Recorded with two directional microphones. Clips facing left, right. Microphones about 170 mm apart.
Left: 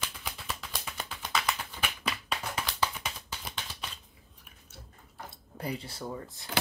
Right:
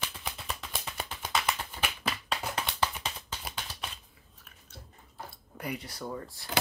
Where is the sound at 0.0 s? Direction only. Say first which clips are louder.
Right 1 dB; centre (ahead or behind).